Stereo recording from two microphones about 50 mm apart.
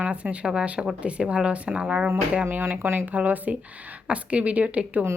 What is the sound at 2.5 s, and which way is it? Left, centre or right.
Speech, right.